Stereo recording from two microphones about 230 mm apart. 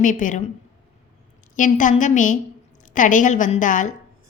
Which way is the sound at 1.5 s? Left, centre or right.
Left.